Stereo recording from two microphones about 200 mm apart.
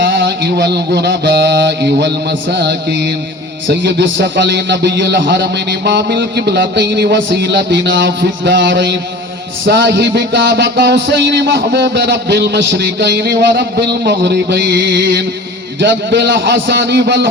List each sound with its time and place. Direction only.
0.0 s music: 55° right (ahead or behind)